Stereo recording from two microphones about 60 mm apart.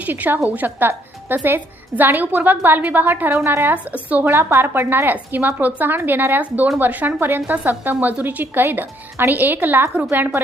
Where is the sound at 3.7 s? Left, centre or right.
Right.